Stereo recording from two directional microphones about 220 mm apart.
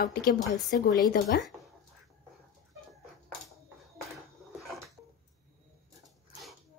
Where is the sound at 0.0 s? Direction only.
45° left (ahead or behind).